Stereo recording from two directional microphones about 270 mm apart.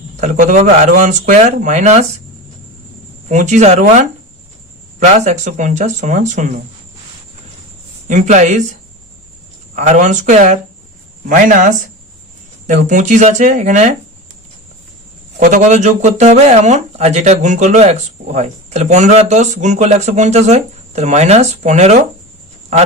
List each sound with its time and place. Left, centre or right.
0.2 s speech: right
3.2 s speech: right
8.0 s speech: right
9.7 s speech: right
15.4 s speech: right